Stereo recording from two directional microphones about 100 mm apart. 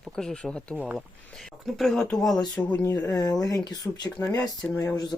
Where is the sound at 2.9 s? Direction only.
40° left (ahead or behind).